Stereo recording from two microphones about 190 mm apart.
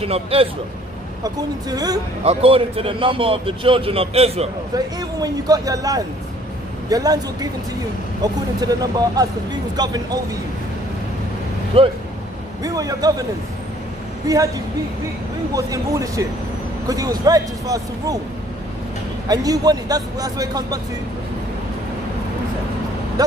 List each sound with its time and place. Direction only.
0.0 s a man's voice: 30° right (ahead or behind)
1.2 s speech: 20° right (ahead or behind)
2.2 s speech: 30° right (ahead or behind)
4.7 s speech: 20° right (ahead or behind)
11.7 s speech: 30° right (ahead or behind)
12.6 s speech: 20° right (ahead or behind)
14.2 s speech: 20° right (ahead or behind)
15.5 s speech: 15° right (ahead or behind)
19.2 s speech: 20° right (ahead or behind)